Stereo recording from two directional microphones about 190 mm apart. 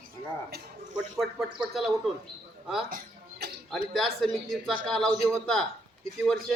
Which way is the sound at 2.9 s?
50° right (ahead or behind).